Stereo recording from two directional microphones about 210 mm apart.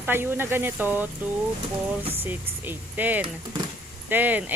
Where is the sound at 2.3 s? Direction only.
10° right (ahead or behind).